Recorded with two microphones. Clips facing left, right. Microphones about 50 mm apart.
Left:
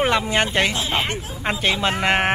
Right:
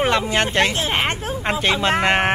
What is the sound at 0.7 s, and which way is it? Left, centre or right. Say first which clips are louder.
Speech: right 2 dB; right.